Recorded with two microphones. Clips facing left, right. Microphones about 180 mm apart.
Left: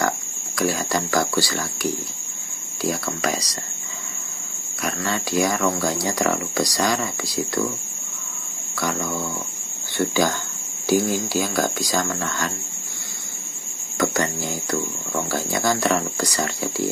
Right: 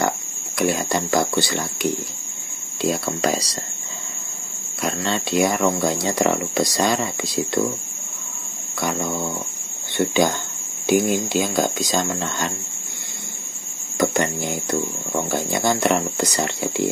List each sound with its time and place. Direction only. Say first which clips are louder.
0.6 s speech: right 2 dB; 20° right (ahead or behind)
4.8 s speech: right 2 dB; 25° right (ahead or behind)
8.7 s speech: right 1 dB; 20° right (ahead or behind)
13.9 s speech: right 2 dB; 20° right (ahead or behind)